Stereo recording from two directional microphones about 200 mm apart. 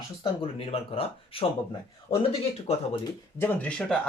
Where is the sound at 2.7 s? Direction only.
25° left (ahead or behind).